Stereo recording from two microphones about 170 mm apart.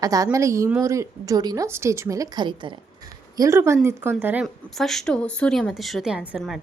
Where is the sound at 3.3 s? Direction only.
15° right (ahead or behind).